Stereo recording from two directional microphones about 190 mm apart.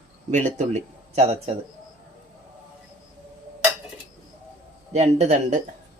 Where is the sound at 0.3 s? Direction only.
40° right (ahead or behind).